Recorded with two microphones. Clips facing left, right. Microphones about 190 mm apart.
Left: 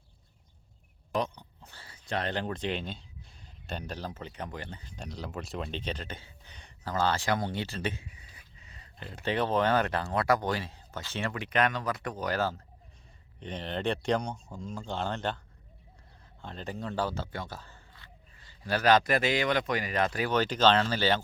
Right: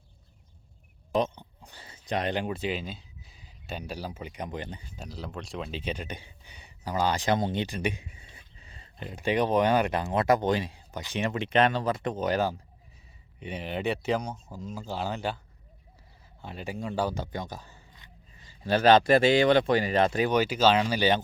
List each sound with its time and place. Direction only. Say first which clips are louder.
1.1 s speech: right 4 dB; 20° right (ahead or behind)
8.0 s a sound: right 2 dB; 25° right (ahead or behind)
9.0 s speech: right 4 dB; 15° right (ahead or behind)
16.4 s speech: right 2 dB; 10° right (ahead or behind)
20.4 s speech: left 2 dB; 10° right (ahead or behind)